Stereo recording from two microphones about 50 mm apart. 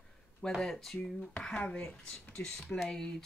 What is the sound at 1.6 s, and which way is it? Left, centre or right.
A woman's voice, left.